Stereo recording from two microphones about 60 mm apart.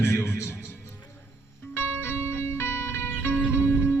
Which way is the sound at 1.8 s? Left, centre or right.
Left.